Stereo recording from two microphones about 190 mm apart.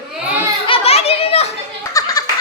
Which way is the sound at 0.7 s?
30° left (ahead or behind).